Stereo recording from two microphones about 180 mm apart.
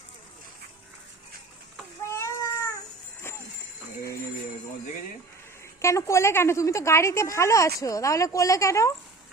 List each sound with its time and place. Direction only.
2.1 s cat: 15° left (ahead or behind)
5.8 s a woman's voice: 15° left (ahead or behind)